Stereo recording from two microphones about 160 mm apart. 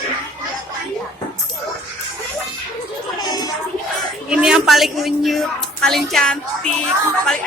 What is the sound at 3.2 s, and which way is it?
Music, 25° left (ahead or behind).